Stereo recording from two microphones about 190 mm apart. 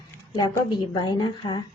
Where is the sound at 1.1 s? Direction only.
25° left (ahead or behind).